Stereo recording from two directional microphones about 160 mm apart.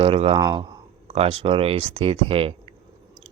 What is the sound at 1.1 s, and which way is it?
Speech, 40° right (ahead or behind).